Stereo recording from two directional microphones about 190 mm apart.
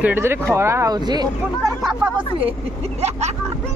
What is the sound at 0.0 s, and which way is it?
Speech, 10° right (ahead or behind).